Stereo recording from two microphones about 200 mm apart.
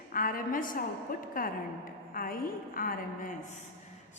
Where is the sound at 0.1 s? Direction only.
45° left (ahead or behind).